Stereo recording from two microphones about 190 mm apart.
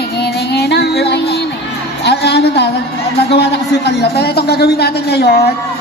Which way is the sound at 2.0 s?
60° left (ahead or behind).